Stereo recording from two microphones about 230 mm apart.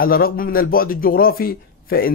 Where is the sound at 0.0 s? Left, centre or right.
Left.